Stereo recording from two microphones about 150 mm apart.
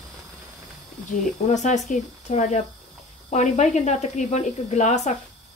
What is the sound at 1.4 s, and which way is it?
Speech, 55° left (ahead or behind).